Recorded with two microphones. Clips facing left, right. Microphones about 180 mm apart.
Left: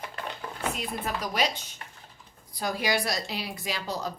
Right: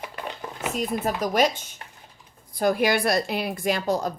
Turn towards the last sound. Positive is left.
turn(degrees=-50)  # may be behind; listen again after turning